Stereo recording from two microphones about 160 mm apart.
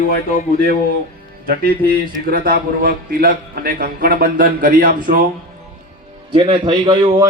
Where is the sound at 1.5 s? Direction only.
65° right (ahead or behind).